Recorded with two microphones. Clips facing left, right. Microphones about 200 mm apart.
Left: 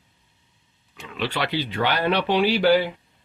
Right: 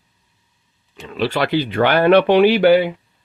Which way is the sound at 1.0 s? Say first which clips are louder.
Right 7 dB; 40° right (ahead or behind).